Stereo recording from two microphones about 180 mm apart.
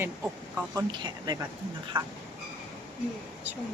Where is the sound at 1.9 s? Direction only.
10° right (ahead or behind).